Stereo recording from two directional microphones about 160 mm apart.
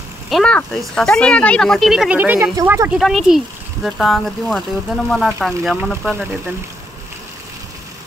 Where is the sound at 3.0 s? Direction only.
Centre (ahead or behind).